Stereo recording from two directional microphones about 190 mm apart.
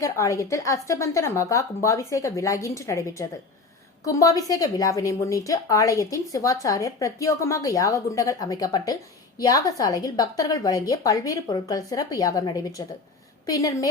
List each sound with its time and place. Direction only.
0.0 s a woman's voice: 15° left (ahead or behind)